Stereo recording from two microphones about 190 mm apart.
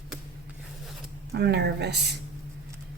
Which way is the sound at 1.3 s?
60° right (ahead or behind).